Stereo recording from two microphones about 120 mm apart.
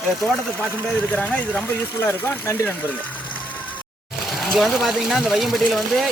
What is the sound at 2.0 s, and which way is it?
Speech, 20° left (ahead or behind).